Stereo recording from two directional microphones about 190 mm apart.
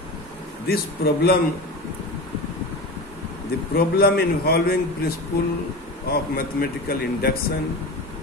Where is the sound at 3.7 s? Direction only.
55° left (ahead or behind).